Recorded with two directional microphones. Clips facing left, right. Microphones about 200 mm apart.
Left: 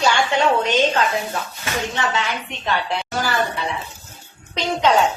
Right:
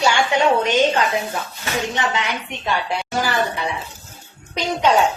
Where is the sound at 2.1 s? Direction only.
15° right (ahead or behind).